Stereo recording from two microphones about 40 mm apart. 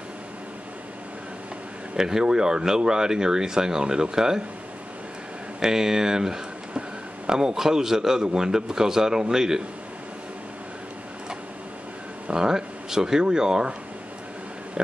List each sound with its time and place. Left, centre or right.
2.0 s speech: centre
5.6 s speech: centre
12.4 s speech: centre